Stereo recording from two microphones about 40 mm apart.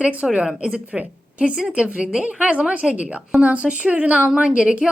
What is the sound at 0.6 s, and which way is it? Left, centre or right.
A woman's voice, right.